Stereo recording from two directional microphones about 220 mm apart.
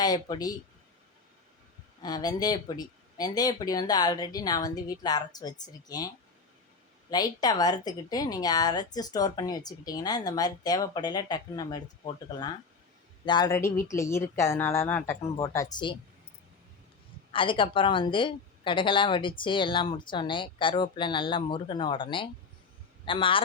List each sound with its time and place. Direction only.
0.0 s a woman's voice: 15° left (ahead or behind)
2.0 s a woman's voice: 15° left (ahead or behind)
7.1 s a woman's voice: 20° left (ahead or behind)
17.3 s a woman's voice: 25° left (ahead or behind)